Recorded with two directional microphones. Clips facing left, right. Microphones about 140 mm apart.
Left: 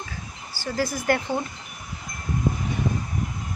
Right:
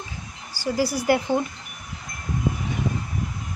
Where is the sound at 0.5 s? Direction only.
10° right (ahead or behind).